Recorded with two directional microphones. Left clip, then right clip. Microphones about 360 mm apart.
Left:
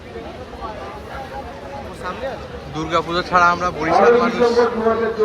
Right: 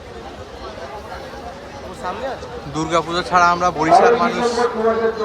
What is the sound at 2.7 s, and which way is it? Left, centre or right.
A man's voice, centre.